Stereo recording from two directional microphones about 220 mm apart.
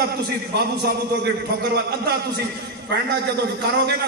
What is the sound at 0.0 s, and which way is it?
A man's voice, 45° right (ahead or behind).